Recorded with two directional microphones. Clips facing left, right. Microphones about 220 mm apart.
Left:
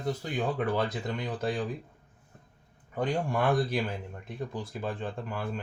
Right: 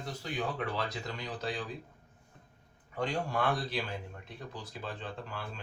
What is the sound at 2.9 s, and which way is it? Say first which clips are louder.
Speech: left 4 dB; 50° left (ahead or behind).